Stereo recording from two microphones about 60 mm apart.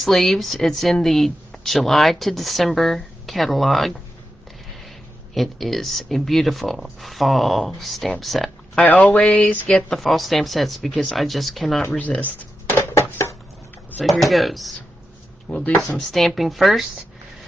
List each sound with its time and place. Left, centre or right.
0.0 s speech: centre
5.3 s speech: centre
8.8 s speech: left
9.9 s speech: centre
12.0 s speech: left
12.6 s a sound: left
14.0 s speech: centre
15.4 s speech: centre